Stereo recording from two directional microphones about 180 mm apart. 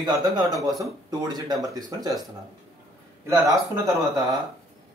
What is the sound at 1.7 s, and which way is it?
Speech, 20° right (ahead or behind).